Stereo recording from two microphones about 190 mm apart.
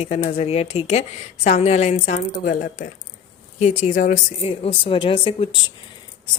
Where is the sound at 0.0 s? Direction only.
35° left (ahead or behind).